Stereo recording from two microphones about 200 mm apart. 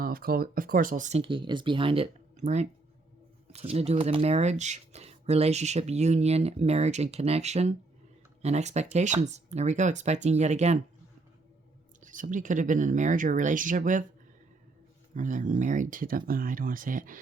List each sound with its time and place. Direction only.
0.0 s speech: 50° right (ahead or behind)
12.0 s speech: 40° right (ahead or behind)
15.1 s speech: 40° right (ahead or behind)